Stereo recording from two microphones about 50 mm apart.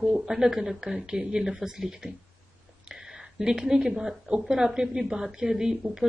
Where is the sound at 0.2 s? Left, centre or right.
Centre.